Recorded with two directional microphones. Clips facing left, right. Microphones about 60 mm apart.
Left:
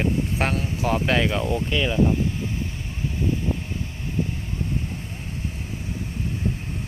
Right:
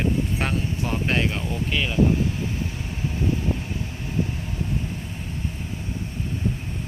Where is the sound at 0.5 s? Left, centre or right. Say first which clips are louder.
Left 3 dB; left.